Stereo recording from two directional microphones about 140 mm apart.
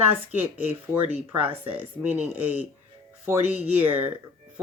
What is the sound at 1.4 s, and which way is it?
Speech, 40° right (ahead or behind).